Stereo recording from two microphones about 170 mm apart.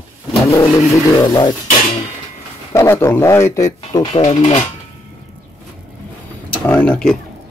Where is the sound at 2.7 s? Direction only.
15° left (ahead or behind).